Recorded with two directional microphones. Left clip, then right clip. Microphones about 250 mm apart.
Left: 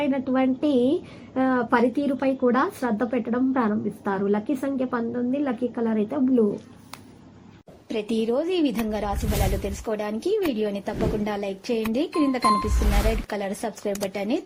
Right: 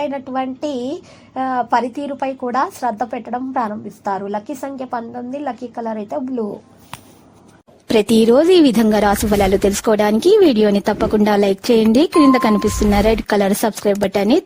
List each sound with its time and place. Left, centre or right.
0.0 s a woman's voice: centre
7.9 s a woman's voice: right